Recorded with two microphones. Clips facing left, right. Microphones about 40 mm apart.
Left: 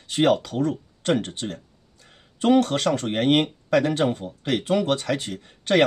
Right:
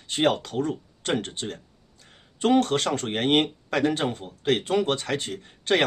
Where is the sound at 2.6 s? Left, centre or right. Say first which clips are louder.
Left 2 dB; right.